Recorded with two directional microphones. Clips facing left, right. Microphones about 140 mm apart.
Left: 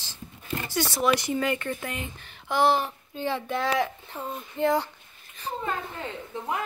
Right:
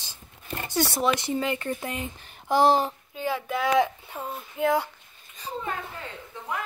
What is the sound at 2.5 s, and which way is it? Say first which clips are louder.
Speech: right 2 dB; 35° right (ahead or behind).